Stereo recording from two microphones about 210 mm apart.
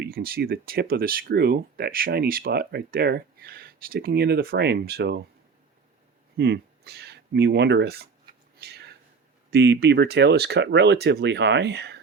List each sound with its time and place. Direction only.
0.0 s speech: 45° right (ahead or behind)
6.3 s speech: 50° right (ahead or behind)
8.6 s a sound: 50° right (ahead or behind)
9.5 s speech: 55° right (ahead or behind)